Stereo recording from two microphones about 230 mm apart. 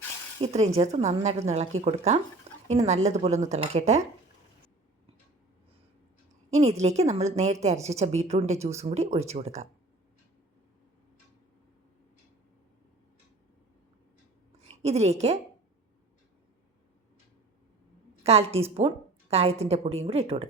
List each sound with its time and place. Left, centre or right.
0.4 s a woman's voice: right
6.5 s a woman's voice: right
14.6 s a woman's voice: right
18.2 s a woman's voice: right